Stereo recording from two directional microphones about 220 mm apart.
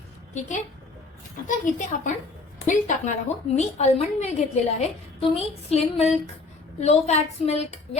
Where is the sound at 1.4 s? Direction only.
35° left (ahead or behind).